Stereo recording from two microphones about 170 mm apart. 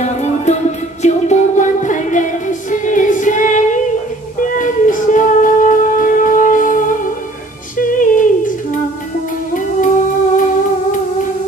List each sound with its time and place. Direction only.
0.0 s music: 40° left (ahead or behind)
9.5 s music: 50° left (ahead or behind)